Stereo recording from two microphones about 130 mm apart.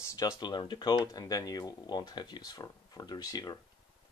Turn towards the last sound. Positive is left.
turn(degrees=30)  # may be behind; listen again after turning